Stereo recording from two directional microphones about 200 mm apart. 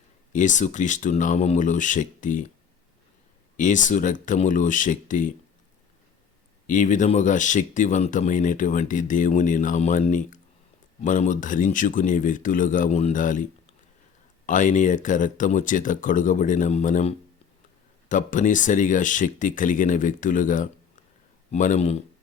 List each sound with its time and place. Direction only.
0.3 s speech: 40° left (ahead or behind)
3.6 s speech: 40° left (ahead or behind)
6.7 s speech: 40° left (ahead or behind)